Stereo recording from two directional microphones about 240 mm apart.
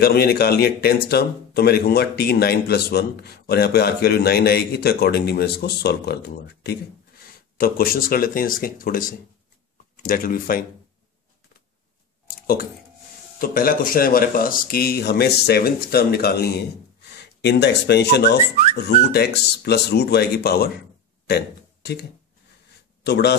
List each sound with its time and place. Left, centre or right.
0.0 s speech: left
13.4 s speech: left
21.3 s a sound: left
23.0 s speech: left